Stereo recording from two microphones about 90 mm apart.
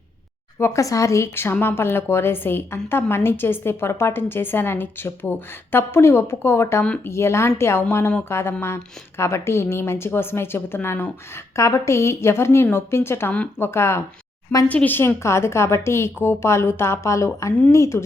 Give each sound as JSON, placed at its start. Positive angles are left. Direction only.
{"t": 0.6, "sound": "a woman's voice", "side_deg": 35}
{"t": 14.7, "sound": "a woman's voice", "side_deg": 20}